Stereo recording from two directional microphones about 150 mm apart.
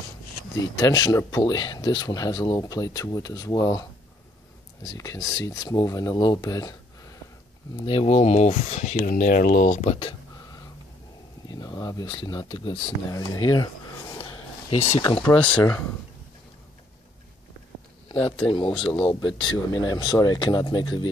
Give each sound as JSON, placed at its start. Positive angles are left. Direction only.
{"t": 0.7, "sound": "speech", "side_deg": 25}
{"t": 4.8, "sound": "speech", "side_deg": 25}
{"t": 7.8, "sound": "speech", "side_deg": 35}
{"t": 8.9, "sound": "speech", "side_deg": 65}
{"t": 11.4, "sound": "speech", "side_deg": 25}
{"t": 15.3, "sound": "speech", "side_deg": 10}
{"t": 18.1, "sound": "speech", "side_deg": 10}
{"t": 19.2, "sound": "speech", "side_deg": 30}